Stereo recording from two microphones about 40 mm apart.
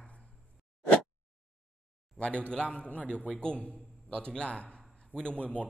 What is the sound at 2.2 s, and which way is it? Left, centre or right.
Speech, left.